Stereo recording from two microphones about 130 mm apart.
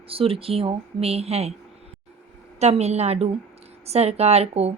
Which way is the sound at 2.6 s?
55° right (ahead or behind).